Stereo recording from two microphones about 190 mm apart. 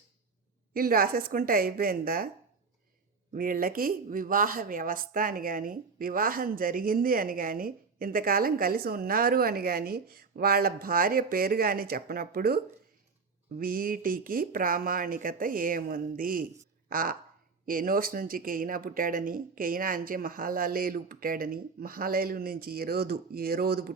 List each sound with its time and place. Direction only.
0.7 s speech: 50° right (ahead or behind)
3.3 s speech: 50° right (ahead or behind)